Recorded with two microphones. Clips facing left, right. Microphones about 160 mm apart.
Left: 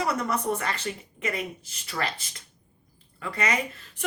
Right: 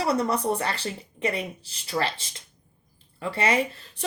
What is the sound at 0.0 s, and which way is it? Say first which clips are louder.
A woman's voice: right 3 dB; 30° right (ahead or behind).